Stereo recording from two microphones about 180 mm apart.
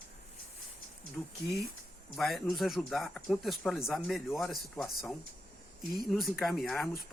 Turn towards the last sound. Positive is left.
turn(degrees=0)  # may be behind; listen again after turning